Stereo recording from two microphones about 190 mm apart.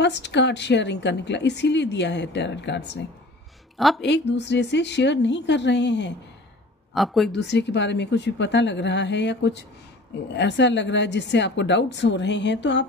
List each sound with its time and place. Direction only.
0.0 s a woman's voice: 65° left (ahead or behind)
3.7 s speech: centre (ahead or behind)
4.0 s a woman's voice: 65° left (ahead or behind)
6.9 s speech: centre (ahead or behind)
7.3 s a woman's voice: 65° left (ahead or behind)